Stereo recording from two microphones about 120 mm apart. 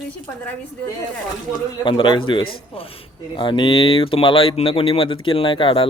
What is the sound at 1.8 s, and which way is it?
Speech, 40° left (ahead or behind).